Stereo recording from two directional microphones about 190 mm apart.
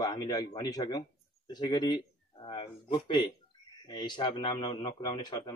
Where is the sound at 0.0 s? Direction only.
20° left (ahead or behind).